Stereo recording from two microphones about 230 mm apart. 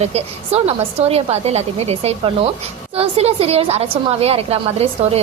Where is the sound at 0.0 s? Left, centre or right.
Right.